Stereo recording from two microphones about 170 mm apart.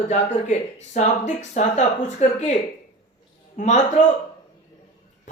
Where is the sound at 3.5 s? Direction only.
45° left (ahead or behind).